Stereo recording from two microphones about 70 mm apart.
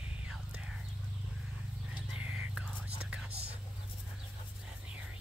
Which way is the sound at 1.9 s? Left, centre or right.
Centre.